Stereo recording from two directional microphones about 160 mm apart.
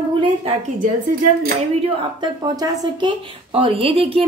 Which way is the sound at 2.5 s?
25° right (ahead or behind).